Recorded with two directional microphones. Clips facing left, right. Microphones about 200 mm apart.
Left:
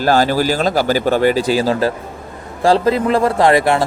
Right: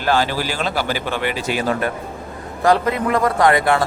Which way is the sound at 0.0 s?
40° left (ahead or behind).